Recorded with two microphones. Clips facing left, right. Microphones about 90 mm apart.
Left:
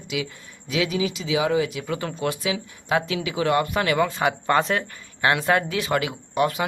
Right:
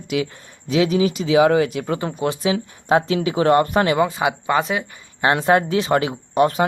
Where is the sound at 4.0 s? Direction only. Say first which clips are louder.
Right 3 dB; 20° right (ahead or behind).